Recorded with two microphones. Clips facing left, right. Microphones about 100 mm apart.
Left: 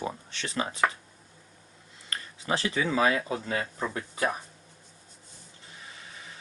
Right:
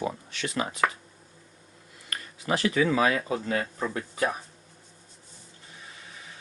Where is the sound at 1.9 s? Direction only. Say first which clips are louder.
Even; 25° left (ahead or behind).